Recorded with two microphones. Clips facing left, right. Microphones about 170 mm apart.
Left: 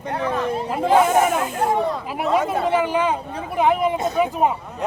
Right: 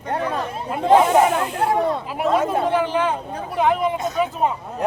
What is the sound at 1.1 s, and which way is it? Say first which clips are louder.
Speech: right 2 dB; 45° left (ahead or behind).